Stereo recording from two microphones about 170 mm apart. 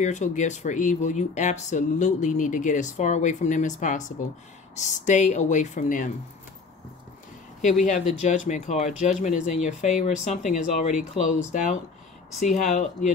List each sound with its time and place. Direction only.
0.0 s speech: 45° left (ahead or behind)
8.1 s speech: 45° left (ahead or behind)